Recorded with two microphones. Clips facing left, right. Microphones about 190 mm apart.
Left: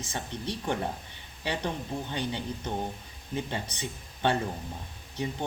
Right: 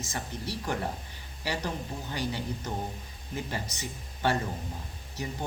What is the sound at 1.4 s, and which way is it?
Speech, 20° left (ahead or behind).